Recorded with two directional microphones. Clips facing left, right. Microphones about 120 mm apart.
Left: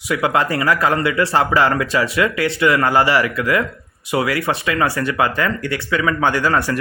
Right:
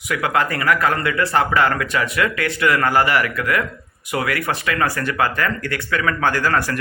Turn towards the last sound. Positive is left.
turn(degrees=25)  # may be behind; listen again after turning